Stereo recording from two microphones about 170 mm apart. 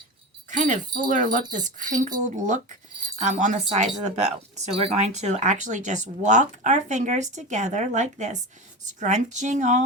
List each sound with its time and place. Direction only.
0.5 s speech: 50° right (ahead or behind)